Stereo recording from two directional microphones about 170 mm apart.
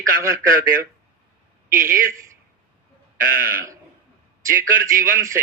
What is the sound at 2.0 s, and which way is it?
Speech, 15° right (ahead or behind).